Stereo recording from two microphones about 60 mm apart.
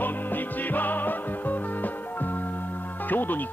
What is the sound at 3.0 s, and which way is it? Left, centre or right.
Music, left.